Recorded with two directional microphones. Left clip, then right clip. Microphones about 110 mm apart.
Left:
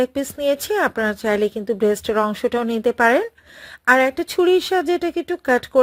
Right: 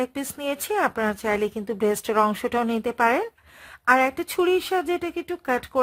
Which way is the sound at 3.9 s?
15° left (ahead or behind).